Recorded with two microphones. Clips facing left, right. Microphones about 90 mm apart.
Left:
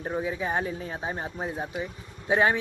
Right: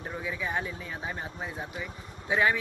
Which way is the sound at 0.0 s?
30° left (ahead or behind).